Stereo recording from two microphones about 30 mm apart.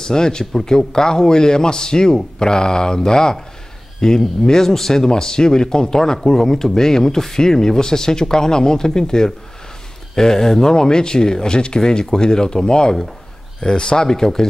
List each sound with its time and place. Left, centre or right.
0.0 s speech: left